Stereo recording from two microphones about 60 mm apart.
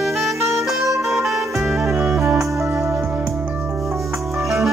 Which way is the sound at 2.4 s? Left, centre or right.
Right.